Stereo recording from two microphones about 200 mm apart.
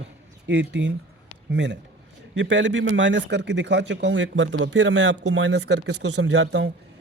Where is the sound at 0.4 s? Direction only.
60° right (ahead or behind).